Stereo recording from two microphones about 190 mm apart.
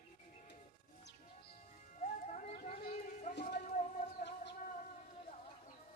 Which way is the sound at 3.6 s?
45° left (ahead or behind).